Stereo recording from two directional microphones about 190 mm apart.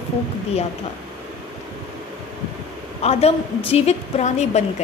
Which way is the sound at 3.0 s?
35° left (ahead or behind).